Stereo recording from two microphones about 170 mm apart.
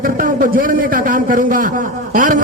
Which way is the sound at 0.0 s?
55° right (ahead or behind).